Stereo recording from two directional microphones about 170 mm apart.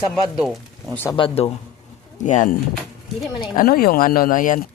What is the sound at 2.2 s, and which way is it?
Speech, 45° left (ahead or behind).